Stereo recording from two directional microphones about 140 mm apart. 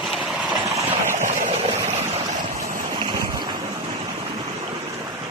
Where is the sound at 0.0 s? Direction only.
Centre (ahead or behind).